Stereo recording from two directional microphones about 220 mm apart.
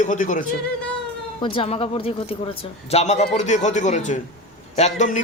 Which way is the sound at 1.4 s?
25° left (ahead or behind).